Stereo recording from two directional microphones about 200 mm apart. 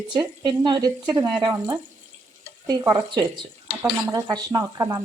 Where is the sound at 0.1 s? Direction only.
20° right (ahead or behind).